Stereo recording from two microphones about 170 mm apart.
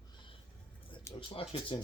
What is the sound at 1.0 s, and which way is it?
Speech, 30° left (ahead or behind).